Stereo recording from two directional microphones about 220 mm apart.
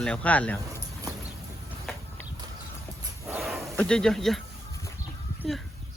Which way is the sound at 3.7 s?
5° left (ahead or behind).